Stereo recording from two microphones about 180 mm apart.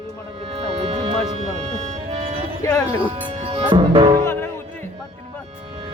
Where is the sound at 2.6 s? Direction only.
20° left (ahead or behind).